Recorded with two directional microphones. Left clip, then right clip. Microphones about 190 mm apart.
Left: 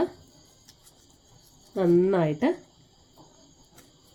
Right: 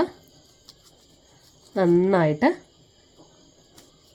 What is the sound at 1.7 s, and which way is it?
Speech, 25° right (ahead or behind).